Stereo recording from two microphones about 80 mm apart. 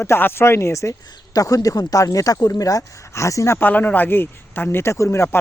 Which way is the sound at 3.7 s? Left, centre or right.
Left.